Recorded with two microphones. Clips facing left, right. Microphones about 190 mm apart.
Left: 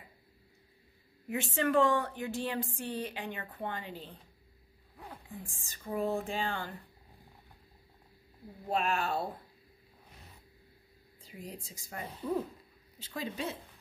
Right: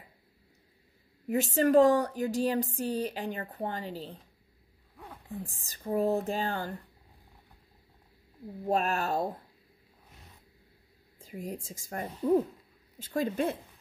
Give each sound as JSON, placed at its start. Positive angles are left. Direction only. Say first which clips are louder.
{"t": 1.3, "sound": "speech", "louder": "right 6 dB", "side_deg": -40}
{"t": 5.5, "sound": "speech", "louder": "right 6 dB", "side_deg": -40}
{"t": 8.6, "sound": "speech", "louder": "right 3 dB", "side_deg": -40}
{"t": 11.1, "sound": "speech", "louder": "right 7 dB", "side_deg": -45}